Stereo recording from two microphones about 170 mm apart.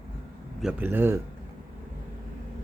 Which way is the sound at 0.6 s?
10° right (ahead or behind).